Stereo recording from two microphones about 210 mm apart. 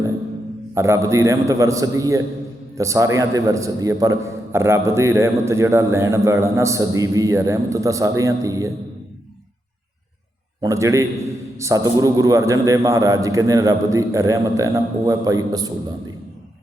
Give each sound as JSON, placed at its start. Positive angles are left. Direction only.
{"t": 0.7, "sound": "a man's voice", "side_deg": -15}
{"t": 10.6, "sound": "a man's voice", "side_deg": -15}